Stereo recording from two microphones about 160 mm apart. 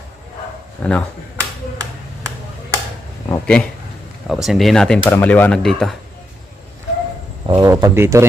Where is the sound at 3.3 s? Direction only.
10° left (ahead or behind).